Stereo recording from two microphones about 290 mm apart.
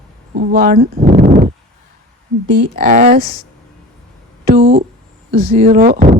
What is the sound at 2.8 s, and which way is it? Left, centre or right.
Speech, right.